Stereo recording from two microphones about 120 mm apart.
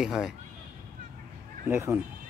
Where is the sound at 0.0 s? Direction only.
5° right (ahead or behind).